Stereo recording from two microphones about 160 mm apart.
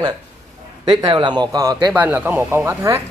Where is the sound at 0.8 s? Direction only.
25° right (ahead or behind).